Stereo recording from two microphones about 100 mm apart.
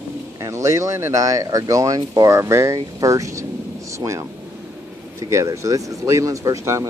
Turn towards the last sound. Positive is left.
turn(degrees=-30)  # may be behind; listen again after turning